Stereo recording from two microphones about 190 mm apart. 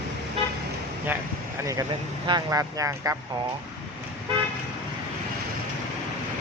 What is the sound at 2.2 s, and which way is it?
Speech, 20° right (ahead or behind).